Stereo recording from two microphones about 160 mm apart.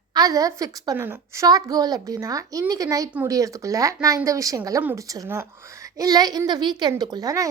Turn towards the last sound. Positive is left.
turn(degrees=-20)  # may be behind; listen again after turning